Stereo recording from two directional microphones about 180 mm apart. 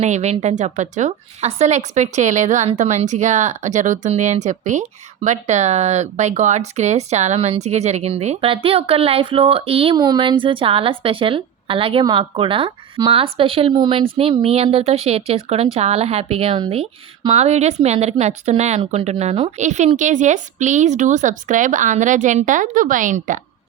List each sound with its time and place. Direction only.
0.0 s a woman's voice: 40° right (ahead or behind)